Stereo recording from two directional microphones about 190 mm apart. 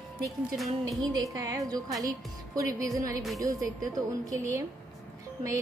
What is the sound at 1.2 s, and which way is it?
A woman's voice, 20° right (ahead or behind).